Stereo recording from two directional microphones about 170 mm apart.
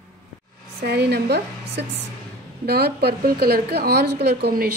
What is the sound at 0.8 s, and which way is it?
A woman's voice, 70° right (ahead or behind).